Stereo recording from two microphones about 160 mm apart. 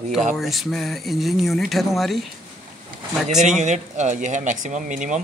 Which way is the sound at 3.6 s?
45° right (ahead or behind).